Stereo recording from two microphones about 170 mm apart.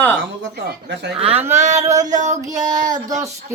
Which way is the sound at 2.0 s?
45° right (ahead or behind).